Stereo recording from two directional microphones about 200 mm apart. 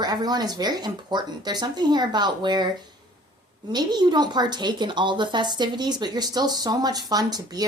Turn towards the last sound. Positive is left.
turn(degrees=-20)  # may be behind; listen again after turning